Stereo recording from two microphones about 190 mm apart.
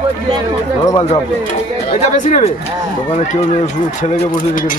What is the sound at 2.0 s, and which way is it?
Speech, 35° left (ahead or behind).